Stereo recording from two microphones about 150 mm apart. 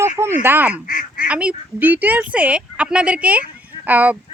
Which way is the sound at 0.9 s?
70° left (ahead or behind).